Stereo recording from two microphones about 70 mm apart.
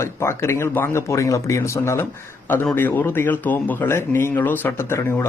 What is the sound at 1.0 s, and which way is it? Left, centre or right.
Speech, left.